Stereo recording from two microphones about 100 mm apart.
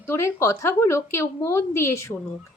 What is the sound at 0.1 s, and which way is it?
Speech, 25° left (ahead or behind).